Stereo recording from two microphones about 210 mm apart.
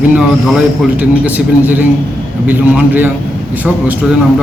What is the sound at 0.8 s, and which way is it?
A man's voice, 5° right (ahead or behind).